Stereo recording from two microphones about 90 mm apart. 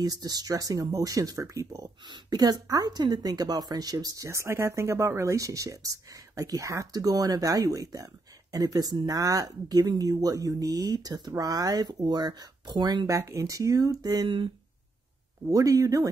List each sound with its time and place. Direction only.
0.0 s speech: 45° right (ahead or behind)
2.0 s speech: 50° right (ahead or behind)
15.5 s speech: 40° right (ahead or behind)